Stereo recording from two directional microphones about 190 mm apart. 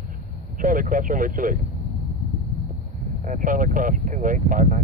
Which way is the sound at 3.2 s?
45° right (ahead or behind).